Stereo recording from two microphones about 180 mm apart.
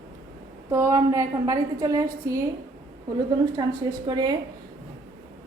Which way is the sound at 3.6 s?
25° right (ahead or behind).